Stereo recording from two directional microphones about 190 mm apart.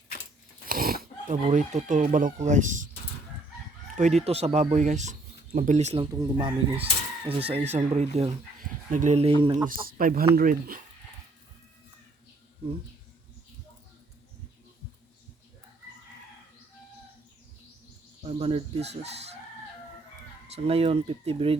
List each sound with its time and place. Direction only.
0.7 s a sound: 50° right (ahead or behind)
1.5 s speech: 40° right (ahead or behind)
3.9 s speech: 35° right (ahead or behind)
6.1 s speech: 25° right (ahead or behind)
9.8 s speech: 50° right (ahead or behind)
18.2 s speech: 30° right (ahead or behind)
20.6 s speech: 30° right (ahead or behind)